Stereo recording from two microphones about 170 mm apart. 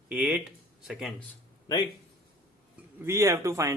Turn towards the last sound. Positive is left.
turn(degrees=-20)  # may be behind; listen again after turning